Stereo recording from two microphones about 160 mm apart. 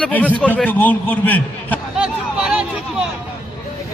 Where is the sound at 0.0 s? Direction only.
10° left (ahead or behind).